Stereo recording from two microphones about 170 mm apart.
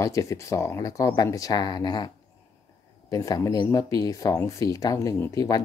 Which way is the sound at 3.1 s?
20° left (ahead or behind).